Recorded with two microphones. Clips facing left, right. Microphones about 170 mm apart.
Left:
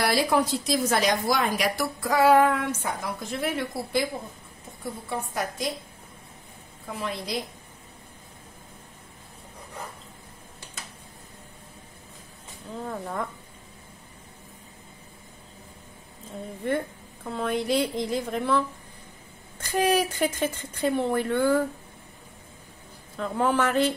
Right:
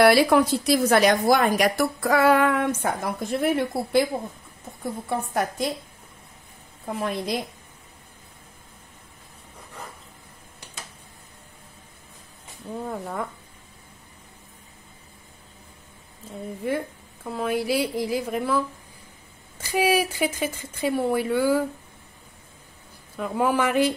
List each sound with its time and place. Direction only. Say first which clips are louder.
0.0 s a woman's voice: right 7 dB; 65° right (ahead or behind)
5.1 s a woman's voice: right 5 dB; 55° right (ahead or behind)
6.9 s a woman's voice: right 5 dB; 55° right (ahead or behind)
12.9 s a woman's voice: left 1 dB; 5° right (ahead or behind)
16.6 s a woman's voice: even; 5° right (ahead or behind)
19.6 s speech: right 1 dB; 10° right (ahead or behind)
23.1 s speech: right 1 dB; 10° right (ahead or behind)